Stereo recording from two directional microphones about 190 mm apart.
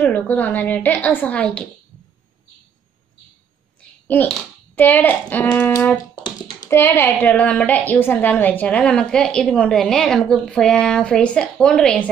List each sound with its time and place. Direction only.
0.0 s a child's voice: 10° left (ahead or behind)
4.1 s a child's voice: 10° left (ahead or behind)
6.1 s a sound: 25° left (ahead or behind)
6.7 s a woman's voice: 15° left (ahead or behind)